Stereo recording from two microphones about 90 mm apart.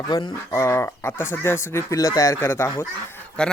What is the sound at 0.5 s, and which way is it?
Speech, 35° left (ahead or behind).